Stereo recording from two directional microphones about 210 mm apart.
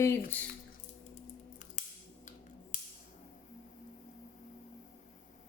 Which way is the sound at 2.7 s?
35° left (ahead or behind).